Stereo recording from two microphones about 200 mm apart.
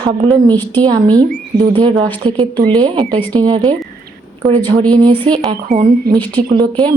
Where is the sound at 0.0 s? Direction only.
20° right (ahead or behind).